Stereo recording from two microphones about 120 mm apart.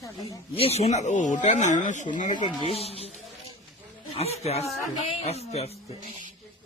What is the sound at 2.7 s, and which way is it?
Speech, 55° left (ahead or behind).